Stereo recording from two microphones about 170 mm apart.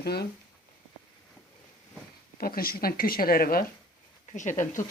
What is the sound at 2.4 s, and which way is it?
Speech, 60° left (ahead or behind).